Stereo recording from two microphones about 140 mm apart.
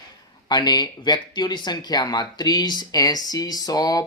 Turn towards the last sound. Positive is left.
turn(degrees=25)  # may be behind; listen again after turning